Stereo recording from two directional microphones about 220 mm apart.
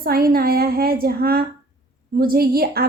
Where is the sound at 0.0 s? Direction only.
45° right (ahead or behind).